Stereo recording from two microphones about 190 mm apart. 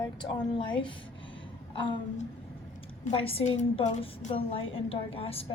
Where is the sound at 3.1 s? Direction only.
30° left (ahead or behind).